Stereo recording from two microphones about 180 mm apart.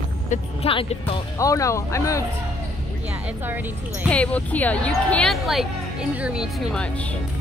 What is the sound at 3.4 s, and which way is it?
Speech, 10° right (ahead or behind).